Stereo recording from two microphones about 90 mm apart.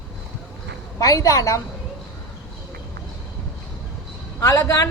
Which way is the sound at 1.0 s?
40° left (ahead or behind).